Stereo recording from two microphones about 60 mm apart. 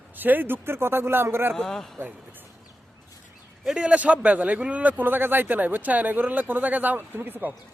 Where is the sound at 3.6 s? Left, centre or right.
Centre; by 7.5 s right.